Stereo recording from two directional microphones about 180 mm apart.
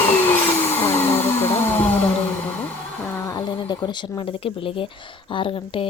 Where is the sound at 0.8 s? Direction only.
10° left (ahead or behind).